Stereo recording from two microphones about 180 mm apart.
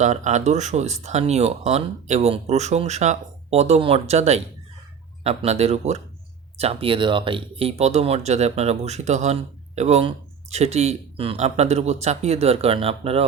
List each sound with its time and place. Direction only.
0.0 s speech: 40° right (ahead or behind)